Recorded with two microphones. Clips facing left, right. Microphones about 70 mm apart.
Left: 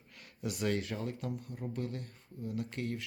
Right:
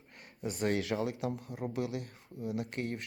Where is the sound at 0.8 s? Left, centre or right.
Right.